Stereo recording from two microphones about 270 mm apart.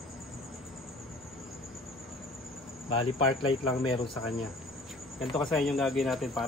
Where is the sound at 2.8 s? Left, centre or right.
Centre.